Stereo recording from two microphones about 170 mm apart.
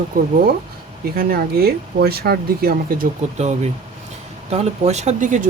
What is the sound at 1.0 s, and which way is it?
Speech, 60° right (ahead or behind).